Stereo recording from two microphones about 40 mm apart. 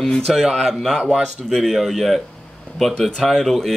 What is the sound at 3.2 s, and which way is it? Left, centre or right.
Speech, centre.